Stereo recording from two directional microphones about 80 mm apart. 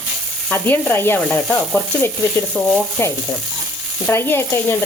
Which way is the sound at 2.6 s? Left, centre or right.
Centre.